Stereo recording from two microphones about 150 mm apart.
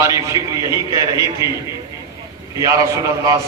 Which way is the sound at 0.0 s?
20° right (ahead or behind).